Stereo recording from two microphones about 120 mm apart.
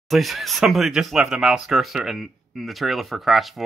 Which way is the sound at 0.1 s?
Centre (ahead or behind).